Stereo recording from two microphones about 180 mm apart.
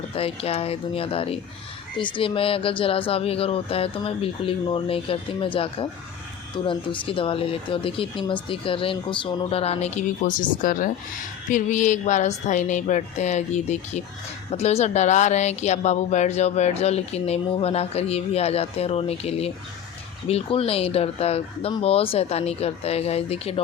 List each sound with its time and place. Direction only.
0.1 s a woman's voice: 35° left (ahead or behind)